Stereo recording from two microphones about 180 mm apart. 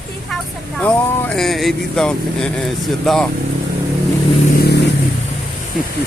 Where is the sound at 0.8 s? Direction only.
10° left (ahead or behind).